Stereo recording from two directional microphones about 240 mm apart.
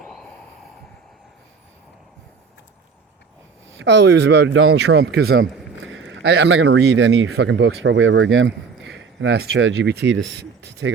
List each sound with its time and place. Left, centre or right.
3.7 s speech: right